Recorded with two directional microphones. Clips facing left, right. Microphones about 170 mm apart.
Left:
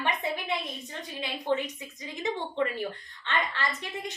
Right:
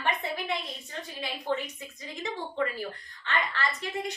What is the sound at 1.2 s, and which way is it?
A woman's voice, 20° left (ahead or behind).